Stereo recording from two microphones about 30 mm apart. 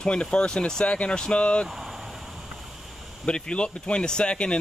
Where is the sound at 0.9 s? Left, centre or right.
Left.